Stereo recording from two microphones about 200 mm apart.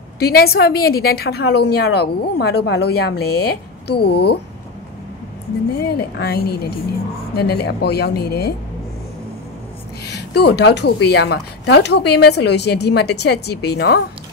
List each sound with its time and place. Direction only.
0.2 s a woman's voice: 50° left (ahead or behind)
5.9 s a woman's voice: 55° left (ahead or behind)
10.0 s a woman's voice: 55° left (ahead or behind)